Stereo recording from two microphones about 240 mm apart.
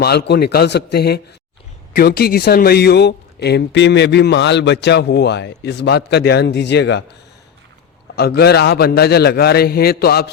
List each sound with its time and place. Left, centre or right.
0.0 s speech: left
8.1 s a man's voice: left